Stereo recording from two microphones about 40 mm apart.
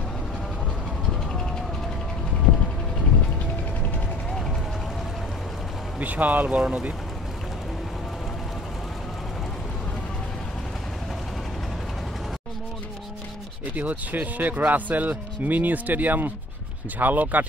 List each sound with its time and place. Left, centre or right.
4.3 s vehicle: centre
5.9 s speech: right
6.6 s speech: right
13.7 s speech: right